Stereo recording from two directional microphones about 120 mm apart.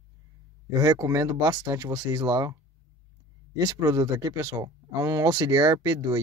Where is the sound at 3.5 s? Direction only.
30° right (ahead or behind).